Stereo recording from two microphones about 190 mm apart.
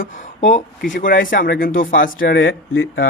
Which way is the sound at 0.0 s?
40° left (ahead or behind).